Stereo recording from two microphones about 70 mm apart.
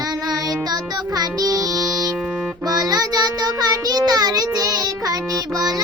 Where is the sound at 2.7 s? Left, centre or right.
Right.